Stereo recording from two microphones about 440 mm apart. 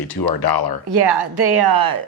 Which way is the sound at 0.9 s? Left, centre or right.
Right.